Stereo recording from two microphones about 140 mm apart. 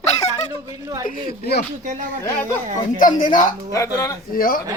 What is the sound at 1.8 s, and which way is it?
Speech, 65° right (ahead or behind).